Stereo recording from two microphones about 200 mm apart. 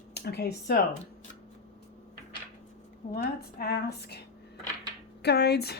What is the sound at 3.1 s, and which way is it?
A woman's voice, 50° left (ahead or behind).